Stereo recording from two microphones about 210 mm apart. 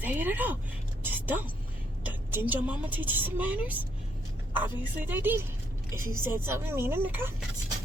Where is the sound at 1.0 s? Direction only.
10° right (ahead or behind).